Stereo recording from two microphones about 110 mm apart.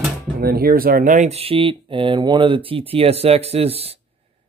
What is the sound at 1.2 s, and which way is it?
Speech, 70° right (ahead or behind).